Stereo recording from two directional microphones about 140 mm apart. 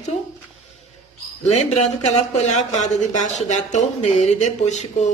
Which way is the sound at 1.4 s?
50° left (ahead or behind).